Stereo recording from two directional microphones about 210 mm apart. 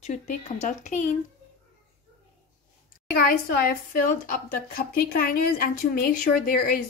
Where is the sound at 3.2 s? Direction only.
40° left (ahead or behind).